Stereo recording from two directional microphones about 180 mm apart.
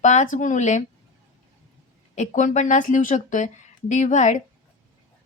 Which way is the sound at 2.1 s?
45° left (ahead or behind).